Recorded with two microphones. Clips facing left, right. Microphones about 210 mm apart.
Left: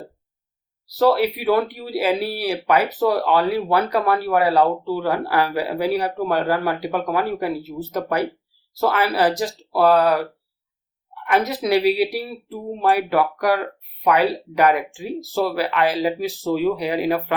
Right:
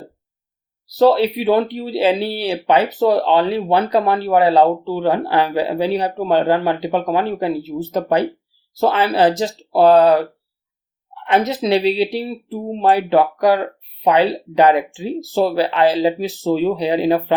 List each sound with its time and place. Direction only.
0.9 s speech: 25° right (ahead or behind)